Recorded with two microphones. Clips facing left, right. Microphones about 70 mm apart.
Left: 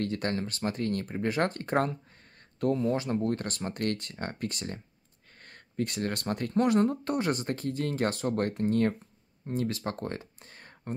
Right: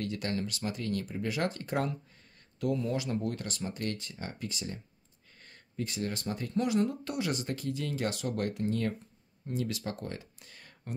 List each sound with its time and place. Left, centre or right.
0.0 s speech: left